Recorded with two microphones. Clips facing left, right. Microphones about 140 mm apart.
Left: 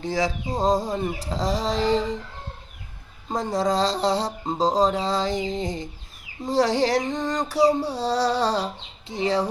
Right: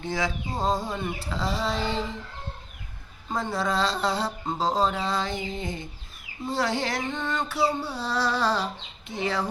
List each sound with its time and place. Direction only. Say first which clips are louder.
0.0 s female singing: left 4 dB; 35° left (ahead or behind)
3.2 s female singing: left 4 dB; 35° left (ahead or behind)